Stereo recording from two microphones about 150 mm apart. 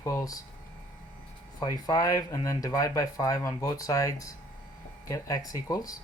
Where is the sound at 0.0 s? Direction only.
20° left (ahead or behind).